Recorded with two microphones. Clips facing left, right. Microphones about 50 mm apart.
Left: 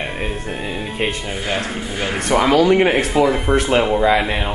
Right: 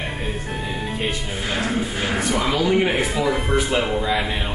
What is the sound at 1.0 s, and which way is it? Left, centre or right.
Speech, left.